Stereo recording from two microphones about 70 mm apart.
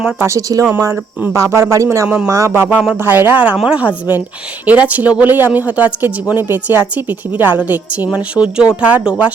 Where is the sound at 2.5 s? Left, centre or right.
Right.